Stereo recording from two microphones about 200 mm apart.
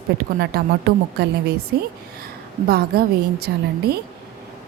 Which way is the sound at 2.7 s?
50° right (ahead or behind).